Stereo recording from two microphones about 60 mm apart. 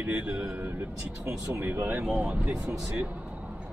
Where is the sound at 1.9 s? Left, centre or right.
Right.